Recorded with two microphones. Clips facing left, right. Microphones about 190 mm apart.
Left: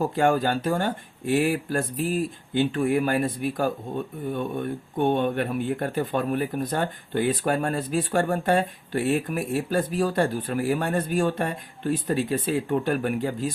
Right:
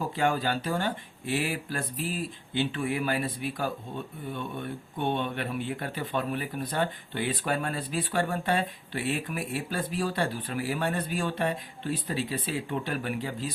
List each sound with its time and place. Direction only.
0.0 s speech: 45° left (ahead or behind)